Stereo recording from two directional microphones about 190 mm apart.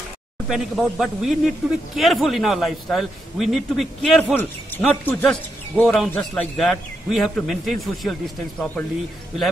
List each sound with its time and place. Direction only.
0.5 s speech: centre (ahead or behind)